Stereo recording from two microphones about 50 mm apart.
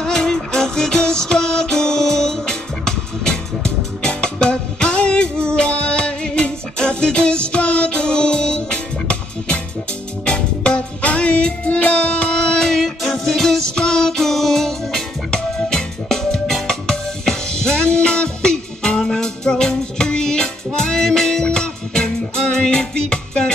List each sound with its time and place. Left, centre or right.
0.0 s music: centre
12.6 s music: centre